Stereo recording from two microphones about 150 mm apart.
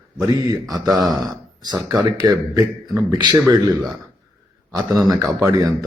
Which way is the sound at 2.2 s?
25° right (ahead or behind).